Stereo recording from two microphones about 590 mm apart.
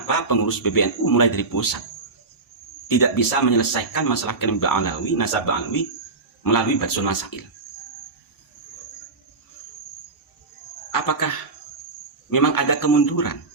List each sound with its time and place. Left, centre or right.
0.3 s speech: left
2.8 s speech: left
10.9 s a sound: left
12.3 s speech: left